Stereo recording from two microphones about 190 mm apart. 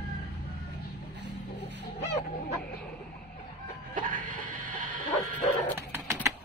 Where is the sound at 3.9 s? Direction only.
45° right (ahead or behind).